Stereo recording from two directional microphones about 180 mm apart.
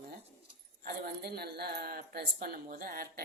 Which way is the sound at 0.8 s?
60° right (ahead or behind).